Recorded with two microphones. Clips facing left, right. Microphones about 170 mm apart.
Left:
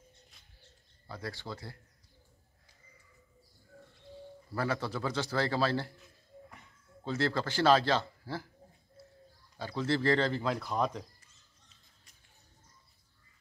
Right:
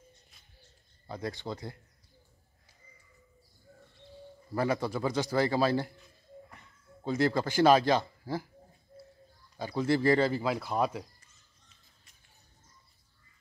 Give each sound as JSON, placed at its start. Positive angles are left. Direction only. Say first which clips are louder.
{"t": 1.0, "sound": "speech", "louder": "right 5 dB", "side_deg": -20}
{"t": 4.5, "sound": "speech", "louder": "right 4 dB", "side_deg": -15}
{"t": 7.1, "sound": "speech", "louder": "right 4 dB", "side_deg": -15}
{"t": 9.6, "sound": "speech", "louder": "right 4 dB", "side_deg": -15}